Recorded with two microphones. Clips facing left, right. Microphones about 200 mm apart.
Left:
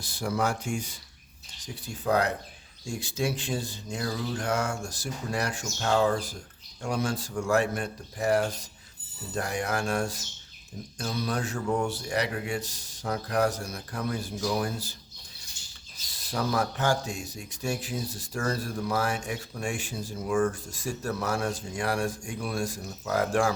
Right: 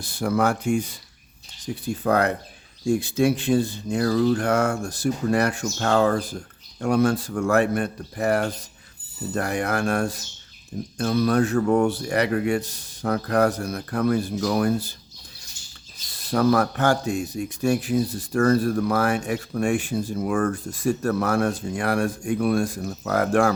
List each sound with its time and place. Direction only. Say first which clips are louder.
0.0 s a man's voice: right 6 dB; 60° right (ahead or behind)
16.3 s a man's voice: right 9 dB; 60° right (ahead or behind)